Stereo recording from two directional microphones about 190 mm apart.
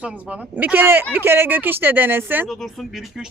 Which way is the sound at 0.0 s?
5° right (ahead or behind).